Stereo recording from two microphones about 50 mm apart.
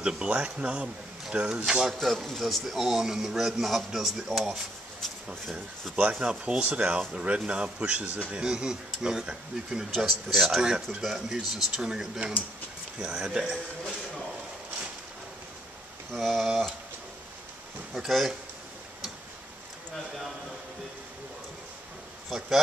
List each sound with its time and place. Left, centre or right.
0.0 s speech: centre
2.0 s speech: centre
5.0 s speech: centre
6.1 s speech: centre
9.8 s speech: centre
10.6 s speech: centre
16.1 s speech: centre
17.9 s speech: centre